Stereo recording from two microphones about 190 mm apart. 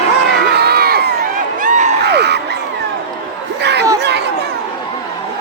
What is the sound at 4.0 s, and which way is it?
Chatter, 65° right (ahead or behind).